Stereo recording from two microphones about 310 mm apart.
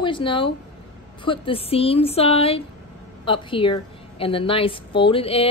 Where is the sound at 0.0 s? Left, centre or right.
Centre.